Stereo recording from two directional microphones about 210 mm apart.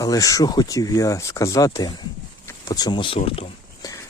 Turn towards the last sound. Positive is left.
turn(degrees=20)  # may be behind; listen again after turning